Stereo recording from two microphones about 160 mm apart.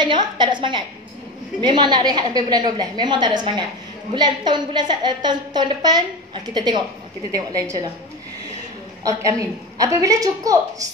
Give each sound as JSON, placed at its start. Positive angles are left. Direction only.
{"t": 0.0, "sound": "a woman's voice", "side_deg": -30}
{"t": 9.0, "sound": "a woman's voice", "side_deg": -20}